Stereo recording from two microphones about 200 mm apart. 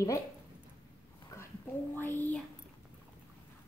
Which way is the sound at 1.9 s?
10° left (ahead or behind).